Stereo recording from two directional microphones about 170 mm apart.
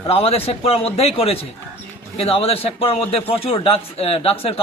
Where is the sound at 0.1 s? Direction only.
35° left (ahead or behind).